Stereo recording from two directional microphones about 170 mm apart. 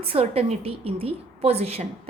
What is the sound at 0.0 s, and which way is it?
A woman's voice, 35° right (ahead or behind).